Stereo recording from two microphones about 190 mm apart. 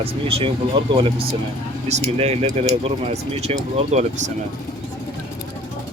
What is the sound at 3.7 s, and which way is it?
Speech, 35° right (ahead or behind).